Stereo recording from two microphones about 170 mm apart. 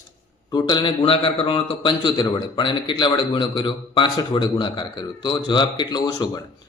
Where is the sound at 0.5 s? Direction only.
25° left (ahead or behind).